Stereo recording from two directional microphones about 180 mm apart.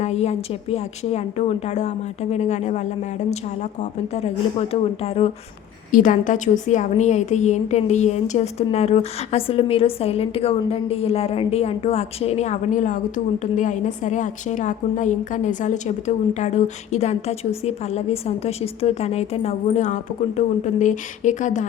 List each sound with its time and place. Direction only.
0.0 s a woman's voice: 35° left (ahead or behind)
5.9 s a woman's voice: 45° left (ahead or behind)